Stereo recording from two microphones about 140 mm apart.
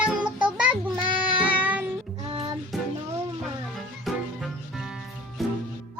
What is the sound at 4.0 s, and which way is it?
Music, centre (ahead or behind).